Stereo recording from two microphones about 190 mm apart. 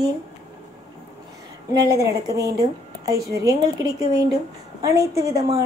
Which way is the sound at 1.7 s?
20° right (ahead or behind).